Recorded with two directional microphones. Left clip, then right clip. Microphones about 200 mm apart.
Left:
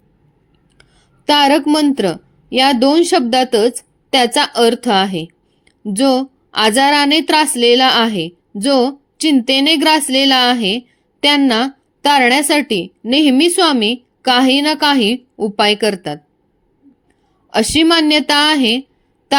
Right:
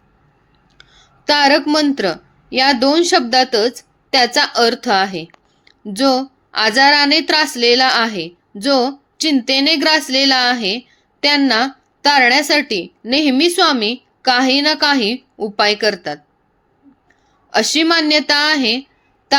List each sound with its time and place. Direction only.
0.8 s a woman's voice: 40° left (ahead or behind)
17.5 s a woman's voice: 45° left (ahead or behind)
19.3 s a sound: 45° left (ahead or behind)